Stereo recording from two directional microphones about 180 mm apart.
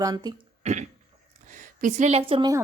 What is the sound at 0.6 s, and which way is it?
Throat clearing, 40° right (ahead or behind).